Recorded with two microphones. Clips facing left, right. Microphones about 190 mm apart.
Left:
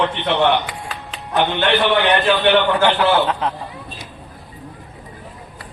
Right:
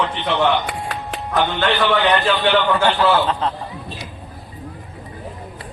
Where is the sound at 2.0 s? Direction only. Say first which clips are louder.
Left 2 dB; 60° left (ahead or behind).